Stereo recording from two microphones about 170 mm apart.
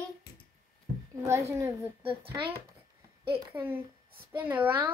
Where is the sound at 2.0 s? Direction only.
30° right (ahead or behind).